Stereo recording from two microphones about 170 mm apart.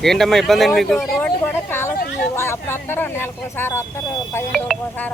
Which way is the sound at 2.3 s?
15° left (ahead or behind).